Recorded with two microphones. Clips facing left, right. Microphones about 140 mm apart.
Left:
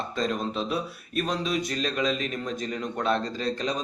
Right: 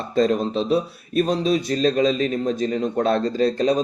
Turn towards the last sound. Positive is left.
turn(degrees=-40)  # may be behind; listen again after turning